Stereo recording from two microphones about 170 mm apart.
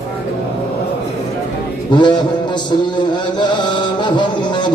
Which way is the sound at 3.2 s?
25° left (ahead or behind).